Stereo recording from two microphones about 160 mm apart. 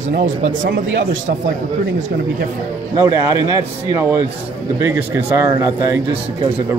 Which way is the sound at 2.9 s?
20° right (ahead or behind).